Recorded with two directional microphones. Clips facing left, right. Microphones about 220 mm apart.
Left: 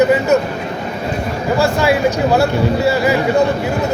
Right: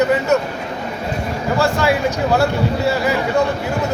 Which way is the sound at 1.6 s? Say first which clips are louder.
Left 2 dB; 5° left (ahead or behind).